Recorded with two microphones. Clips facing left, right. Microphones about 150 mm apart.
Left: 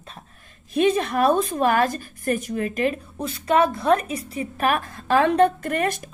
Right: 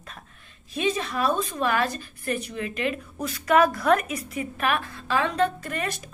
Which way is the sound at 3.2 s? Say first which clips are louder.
Even; 25° left (ahead or behind).